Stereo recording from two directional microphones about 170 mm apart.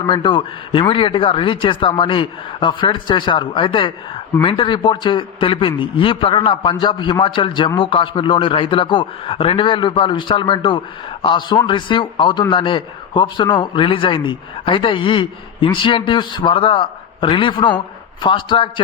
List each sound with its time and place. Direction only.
0.1 s a man's voice: 30° left (ahead or behind)